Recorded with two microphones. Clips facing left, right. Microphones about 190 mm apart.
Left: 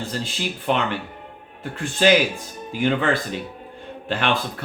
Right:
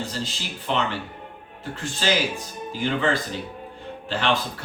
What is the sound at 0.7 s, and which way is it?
Speech, 55° left (ahead or behind).